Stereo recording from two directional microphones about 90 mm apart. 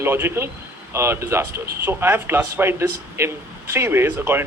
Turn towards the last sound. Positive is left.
turn(degrees=-25)  # may be behind; listen again after turning